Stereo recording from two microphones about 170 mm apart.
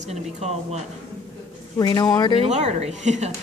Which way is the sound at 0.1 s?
40° right (ahead or behind).